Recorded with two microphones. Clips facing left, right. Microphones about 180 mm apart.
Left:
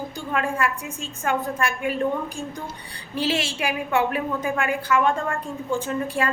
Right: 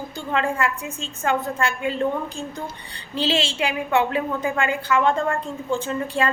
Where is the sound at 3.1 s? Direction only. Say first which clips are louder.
Right 2 dB; 25° right (ahead or behind).